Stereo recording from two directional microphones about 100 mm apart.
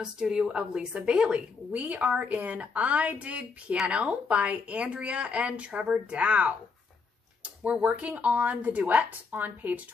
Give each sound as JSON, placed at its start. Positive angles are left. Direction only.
{"t": 0.0, "sound": "a woman's voice", "side_deg": -5}